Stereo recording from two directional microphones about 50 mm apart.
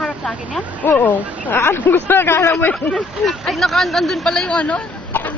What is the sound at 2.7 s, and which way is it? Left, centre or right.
Speech, left.